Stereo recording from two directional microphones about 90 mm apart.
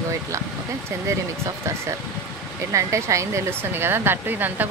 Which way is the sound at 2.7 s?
35° right (ahead or behind).